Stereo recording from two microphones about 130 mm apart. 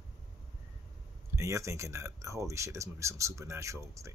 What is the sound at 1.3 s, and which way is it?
Speech, 25° right (ahead or behind).